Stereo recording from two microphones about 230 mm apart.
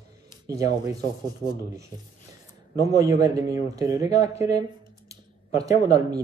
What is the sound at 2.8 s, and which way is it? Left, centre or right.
Speech, centre.